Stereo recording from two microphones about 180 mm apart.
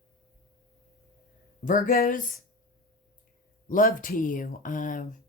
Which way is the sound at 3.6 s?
50° left (ahead or behind).